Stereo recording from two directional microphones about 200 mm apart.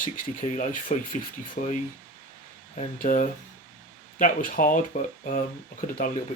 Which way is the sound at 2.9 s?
40° left (ahead or behind).